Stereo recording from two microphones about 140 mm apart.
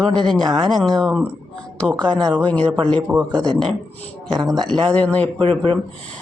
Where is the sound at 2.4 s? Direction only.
10° left (ahead or behind).